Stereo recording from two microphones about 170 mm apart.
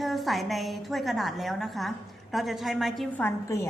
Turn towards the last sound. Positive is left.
turn(degrees=15)  # may be behind; listen again after turning